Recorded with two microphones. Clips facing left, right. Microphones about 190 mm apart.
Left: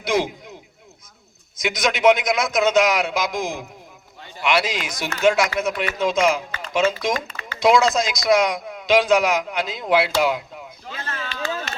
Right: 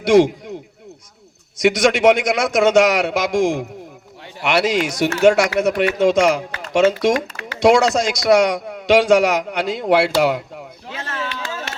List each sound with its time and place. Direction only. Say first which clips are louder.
0.0 s speech: right 9 dB; 70° right (ahead or behind)
1.6 s a man's voice: right 4 dB; 75° right (ahead or behind)
10.8 s a sound: right 4 dB; 75° right (ahead or behind)